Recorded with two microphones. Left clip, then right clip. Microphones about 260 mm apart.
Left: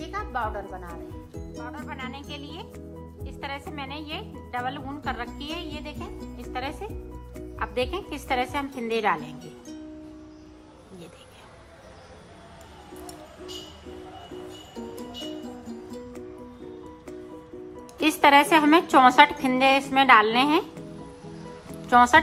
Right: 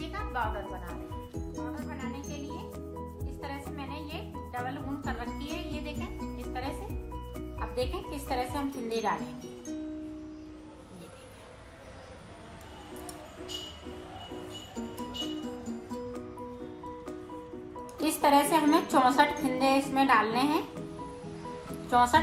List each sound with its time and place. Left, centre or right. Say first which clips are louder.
0.0 s music: left 4 dB; left
1.5 s music: left 3 dB; centre
3.4 s music: left 6 dB; left
8.3 s a woman's voice: left 6 dB; left
18.0 s a woman's voice: left 7 dB; left
21.8 s speech: left 7 dB; left